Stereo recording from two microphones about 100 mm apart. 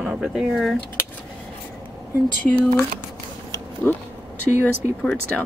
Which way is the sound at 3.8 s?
20° left (ahead or behind).